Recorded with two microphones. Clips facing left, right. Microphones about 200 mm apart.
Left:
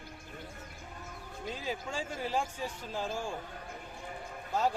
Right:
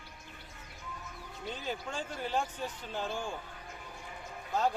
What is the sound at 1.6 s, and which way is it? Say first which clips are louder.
Speech: left 1 dB; 5° left (ahead or behind).